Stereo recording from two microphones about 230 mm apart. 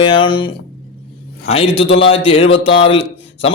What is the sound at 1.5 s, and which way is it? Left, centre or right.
Speech, left.